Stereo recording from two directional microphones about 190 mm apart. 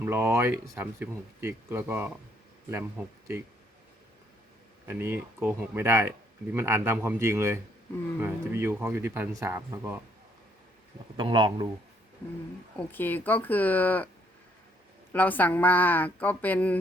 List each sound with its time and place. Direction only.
0.0 s speech: 15° right (ahead or behind)
4.9 s speech: 10° right (ahead or behind)
11.2 s speech: 25° right (ahead or behind)
12.9 s speech: 10° left (ahead or behind)
15.1 s speech: 10° left (ahead or behind)